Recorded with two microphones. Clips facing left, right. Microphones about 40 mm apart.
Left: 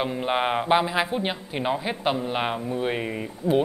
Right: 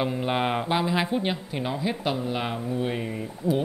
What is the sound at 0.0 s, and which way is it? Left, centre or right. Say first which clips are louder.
Speech: left 1 dB; centre.